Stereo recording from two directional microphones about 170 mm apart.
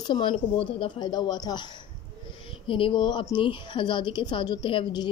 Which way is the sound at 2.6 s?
30° left (ahead or behind).